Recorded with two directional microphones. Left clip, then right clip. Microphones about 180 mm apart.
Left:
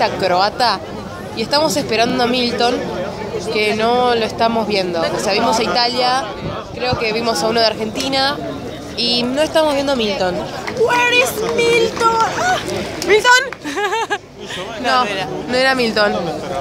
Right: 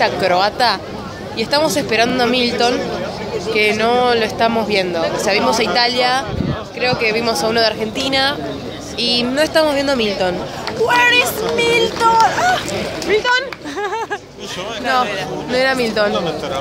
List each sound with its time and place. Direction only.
0.0 s speech: 5° left (ahead or behind)
13.0 s a sound: 40° left (ahead or behind)
15.5 s speech: 15° left (ahead or behind)